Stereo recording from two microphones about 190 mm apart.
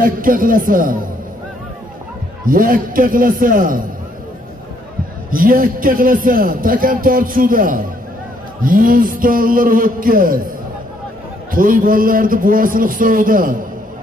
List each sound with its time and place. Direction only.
0.0 s a man's voice: 45° right (ahead or behind)
2.4 s a man's voice: 45° right (ahead or behind)
5.3 s a man's voice: 50° right (ahead or behind)
11.5 s a man's voice: 45° right (ahead or behind)